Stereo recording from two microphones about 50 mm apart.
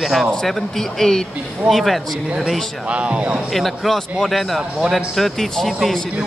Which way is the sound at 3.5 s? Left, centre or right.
Centre.